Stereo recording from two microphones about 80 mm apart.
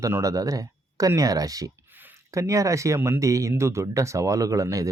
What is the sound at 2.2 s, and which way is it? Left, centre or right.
Speech, right.